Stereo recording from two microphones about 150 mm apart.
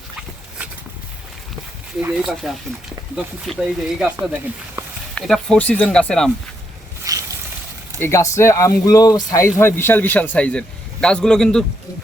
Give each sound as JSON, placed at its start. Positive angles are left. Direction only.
{"t": 2.1, "sound": "speech", "side_deg": 0}
{"t": 4.2, "sound": "speech", "side_deg": -15}
{"t": 5.1, "sound": "a man's voice", "side_deg": 5}
{"t": 7.1, "sound": "a sound", "side_deg": -25}
{"t": 8.0, "sound": "a man's voice", "side_deg": 20}